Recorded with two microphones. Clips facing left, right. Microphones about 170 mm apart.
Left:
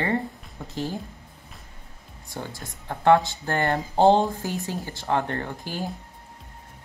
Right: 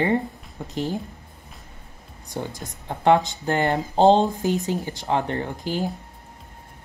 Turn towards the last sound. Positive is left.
turn(degrees=-20)  # may be behind; listen again after turning